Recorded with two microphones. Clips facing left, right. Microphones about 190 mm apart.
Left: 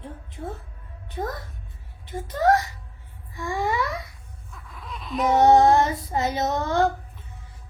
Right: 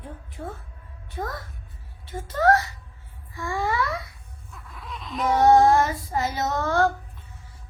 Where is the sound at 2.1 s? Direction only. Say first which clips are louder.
Even; 20° left (ahead or behind).